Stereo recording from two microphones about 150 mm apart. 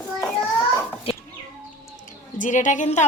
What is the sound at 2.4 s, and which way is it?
Speech, 55° left (ahead or behind).